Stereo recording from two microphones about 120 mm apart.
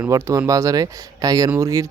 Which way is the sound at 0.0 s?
25° right (ahead or behind).